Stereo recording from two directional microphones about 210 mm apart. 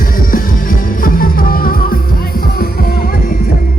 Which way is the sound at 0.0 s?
40° left (ahead or behind).